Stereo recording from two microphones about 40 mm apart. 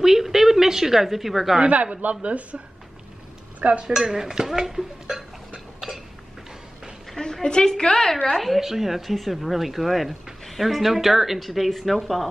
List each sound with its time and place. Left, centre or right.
0.0 s a sound: centre
2.0 s speech: right
3.8 s speech: centre
7.4 s a woman's voice: centre
8.3 s speech: centre